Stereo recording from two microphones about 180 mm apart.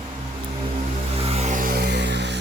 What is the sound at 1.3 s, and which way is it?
Music, 40° right (ahead or behind).